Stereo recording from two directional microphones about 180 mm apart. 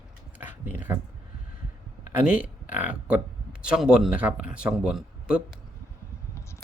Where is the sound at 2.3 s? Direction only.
5° right (ahead or behind).